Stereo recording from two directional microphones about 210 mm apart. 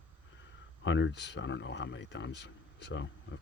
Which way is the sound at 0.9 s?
60° left (ahead or behind).